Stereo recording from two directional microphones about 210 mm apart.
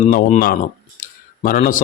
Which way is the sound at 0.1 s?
40° left (ahead or behind).